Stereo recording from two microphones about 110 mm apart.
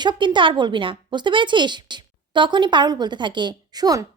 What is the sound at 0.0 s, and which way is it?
Speech, 45° right (ahead or behind).